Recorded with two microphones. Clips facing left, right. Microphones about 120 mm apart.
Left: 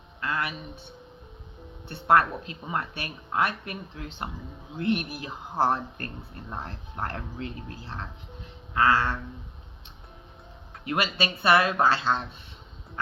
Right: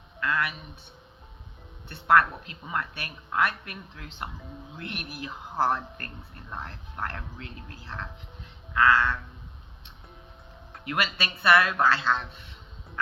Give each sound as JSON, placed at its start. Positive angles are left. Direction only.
{"t": 0.2, "sound": "speech", "side_deg": 25}
{"t": 1.9, "sound": "speech", "side_deg": 25}
{"t": 10.8, "sound": "speech", "side_deg": 25}